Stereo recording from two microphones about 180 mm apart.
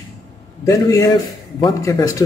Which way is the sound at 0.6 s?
20° left (ahead or behind).